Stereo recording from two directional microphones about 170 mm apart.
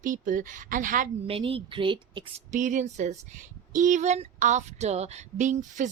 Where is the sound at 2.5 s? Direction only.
45° right (ahead or behind).